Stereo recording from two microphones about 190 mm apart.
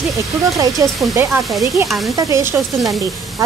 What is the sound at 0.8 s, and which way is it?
Stir, 15° right (ahead or behind).